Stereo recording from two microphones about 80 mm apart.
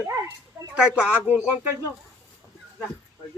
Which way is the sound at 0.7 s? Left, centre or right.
Centre.